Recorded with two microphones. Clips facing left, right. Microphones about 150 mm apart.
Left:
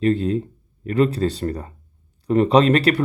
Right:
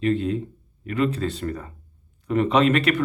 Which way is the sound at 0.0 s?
35° left (ahead or behind).